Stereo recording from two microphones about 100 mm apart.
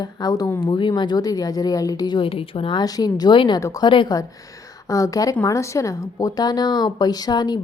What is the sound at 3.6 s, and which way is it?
Speech, 35° left (ahead or behind).